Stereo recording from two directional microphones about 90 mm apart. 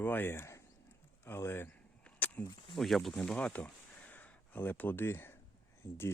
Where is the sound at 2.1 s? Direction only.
15° left (ahead or behind).